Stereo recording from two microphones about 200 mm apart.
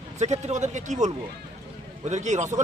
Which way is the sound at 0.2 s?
35° right (ahead or behind).